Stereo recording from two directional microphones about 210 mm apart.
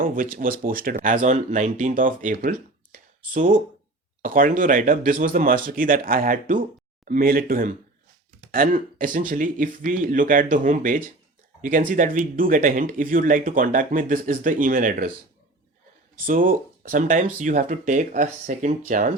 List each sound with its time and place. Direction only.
0.0 s speech: 40° right (ahead or behind)
16.2 s speech: 40° right (ahead or behind)